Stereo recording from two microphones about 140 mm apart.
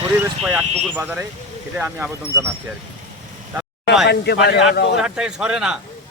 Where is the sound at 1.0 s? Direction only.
10° right (ahead or behind).